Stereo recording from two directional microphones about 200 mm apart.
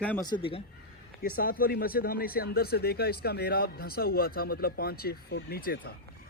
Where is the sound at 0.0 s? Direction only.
5° left (ahead or behind).